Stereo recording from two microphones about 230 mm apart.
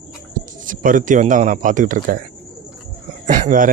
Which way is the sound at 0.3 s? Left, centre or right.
Right.